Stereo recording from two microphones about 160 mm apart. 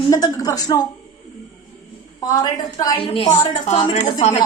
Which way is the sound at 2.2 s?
25° left (ahead or behind).